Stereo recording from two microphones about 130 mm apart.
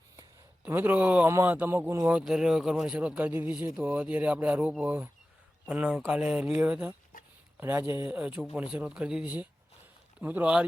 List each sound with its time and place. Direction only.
0.6 s speech: 15° right (ahead or behind)
2.0 s speech: 5° right (ahead or behind)